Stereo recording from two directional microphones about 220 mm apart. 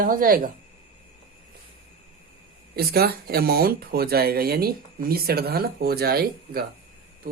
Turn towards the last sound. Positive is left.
turn(degrees=-45)  # may be behind; listen again after turning